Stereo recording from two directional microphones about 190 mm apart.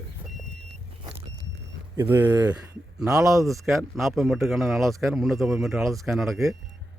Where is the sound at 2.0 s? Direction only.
10° right (ahead or behind).